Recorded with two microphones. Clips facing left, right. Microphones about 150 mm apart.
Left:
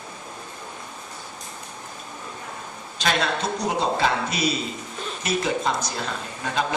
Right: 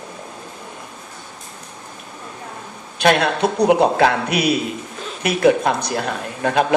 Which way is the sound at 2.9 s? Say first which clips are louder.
Right 8 dB; 60° right (ahead or behind).